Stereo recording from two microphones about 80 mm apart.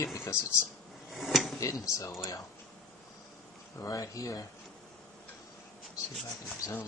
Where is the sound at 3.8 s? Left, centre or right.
Left.